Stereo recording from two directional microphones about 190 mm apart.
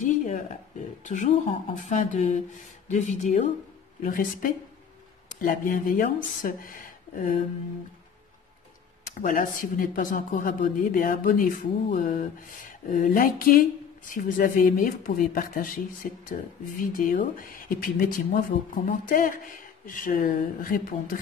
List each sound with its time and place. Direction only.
0.0 s a sound: 40° left (ahead or behind)
1.0 s speech: 40° left (ahead or behind)
9.0 s speech: 45° left (ahead or behind)